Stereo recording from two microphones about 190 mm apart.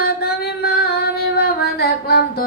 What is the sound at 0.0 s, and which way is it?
Music, 55° left (ahead or behind).